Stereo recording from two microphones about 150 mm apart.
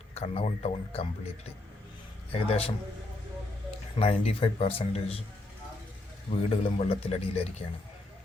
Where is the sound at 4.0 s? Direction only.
40° left (ahead or behind).